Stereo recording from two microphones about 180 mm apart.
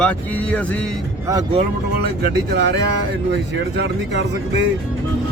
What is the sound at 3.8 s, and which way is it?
Speech, 75° right (ahead or behind).